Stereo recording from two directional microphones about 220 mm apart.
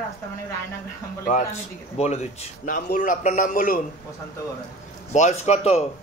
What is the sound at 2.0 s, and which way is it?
A man's voice, 30° left (ahead or behind).